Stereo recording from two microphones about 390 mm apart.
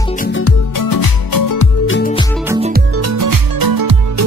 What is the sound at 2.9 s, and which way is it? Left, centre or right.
Music, right.